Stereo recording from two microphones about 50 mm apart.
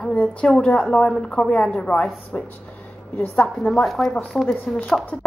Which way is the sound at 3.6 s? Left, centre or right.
Centre.